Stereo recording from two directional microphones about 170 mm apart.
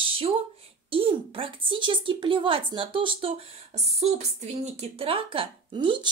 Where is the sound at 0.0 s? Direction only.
35° right (ahead or behind).